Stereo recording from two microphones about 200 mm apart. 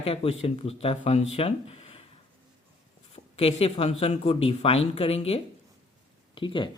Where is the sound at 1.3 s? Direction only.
30° left (ahead or behind).